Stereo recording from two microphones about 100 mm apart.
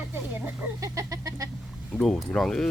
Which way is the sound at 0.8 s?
35° right (ahead or behind).